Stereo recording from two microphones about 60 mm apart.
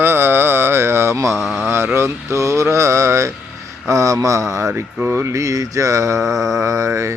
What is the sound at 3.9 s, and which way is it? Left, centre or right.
Speech, right.